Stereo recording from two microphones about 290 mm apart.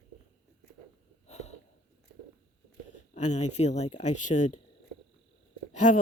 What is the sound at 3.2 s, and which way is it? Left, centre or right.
Speech, left.